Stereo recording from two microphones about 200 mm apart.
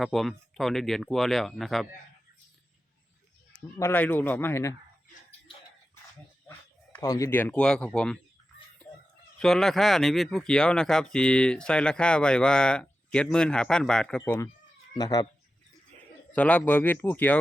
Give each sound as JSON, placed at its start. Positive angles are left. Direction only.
{"t": 0.0, "sound": "speech", "side_deg": 0}
{"t": 3.8, "sound": "speech", "side_deg": 10}
{"t": 6.9, "sound": "speech", "side_deg": 15}
{"t": 8.8, "sound": "fowl", "side_deg": 5}
{"t": 9.4, "sound": "speech", "side_deg": 0}
{"t": 16.3, "sound": "speech", "side_deg": 5}